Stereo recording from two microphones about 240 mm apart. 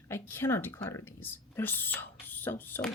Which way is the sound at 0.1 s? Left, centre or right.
Centre.